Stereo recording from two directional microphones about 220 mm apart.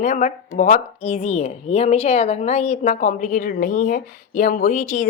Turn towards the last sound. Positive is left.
turn(degrees=35)  # may be behind; listen again after turning